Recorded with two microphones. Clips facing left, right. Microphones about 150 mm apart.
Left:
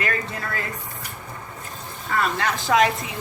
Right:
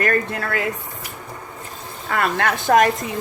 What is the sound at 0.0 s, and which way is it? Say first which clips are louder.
Speech: right 6 dB; 55° right (ahead or behind).